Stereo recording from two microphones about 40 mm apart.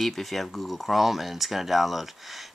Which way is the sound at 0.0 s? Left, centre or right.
Centre.